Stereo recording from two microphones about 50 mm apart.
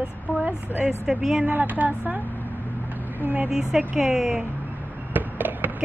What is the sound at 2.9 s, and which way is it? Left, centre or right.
Vehicle, right.